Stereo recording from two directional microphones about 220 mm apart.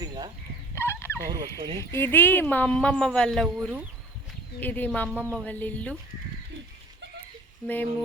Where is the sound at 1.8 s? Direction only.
10° left (ahead or behind); by 3.8 s 5° right (ahead or behind).